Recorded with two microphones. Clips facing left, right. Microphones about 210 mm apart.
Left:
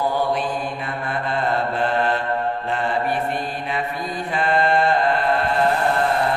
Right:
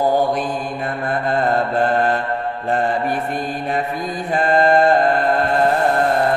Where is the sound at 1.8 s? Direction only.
45° right (ahead or behind).